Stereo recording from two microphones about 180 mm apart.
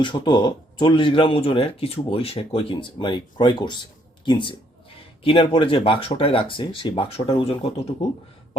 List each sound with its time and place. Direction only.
0.0 s speech: 25° left (ahead or behind)